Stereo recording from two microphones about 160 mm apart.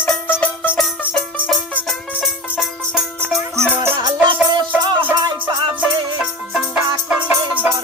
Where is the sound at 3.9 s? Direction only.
30° right (ahead or behind).